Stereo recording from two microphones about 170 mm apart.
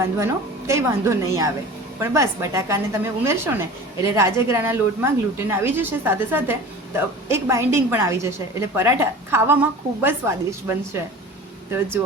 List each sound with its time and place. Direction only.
0.0 s a woman's voice: 15° right (ahead or behind)